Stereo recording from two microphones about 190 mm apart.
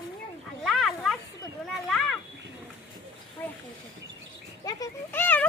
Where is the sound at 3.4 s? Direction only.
10° left (ahead or behind).